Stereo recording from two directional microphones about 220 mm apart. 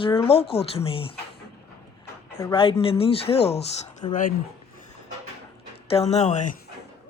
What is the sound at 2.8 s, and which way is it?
A woman's voice, 25° left (ahead or behind).